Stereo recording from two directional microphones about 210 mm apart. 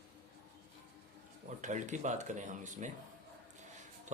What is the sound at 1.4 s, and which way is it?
Speech, 35° right (ahead or behind).